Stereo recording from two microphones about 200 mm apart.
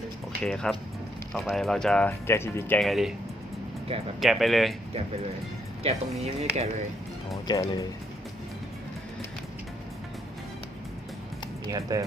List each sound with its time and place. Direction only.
0.4 s speech: 5° left (ahead or behind)
4.2 s speech: centre (ahead or behind)
5.8 s speech: 30° right (ahead or behind)
7.4 s speech: 20° left (ahead or behind)
11.7 s speech: 15° right (ahead or behind)